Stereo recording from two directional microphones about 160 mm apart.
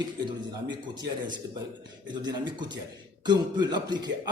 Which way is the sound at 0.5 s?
25° right (ahead or behind).